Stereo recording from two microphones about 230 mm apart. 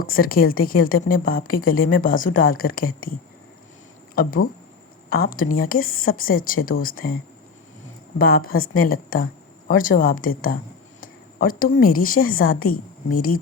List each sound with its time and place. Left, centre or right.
0.0 s a woman's voice: left
8.2 s a woman's voice: left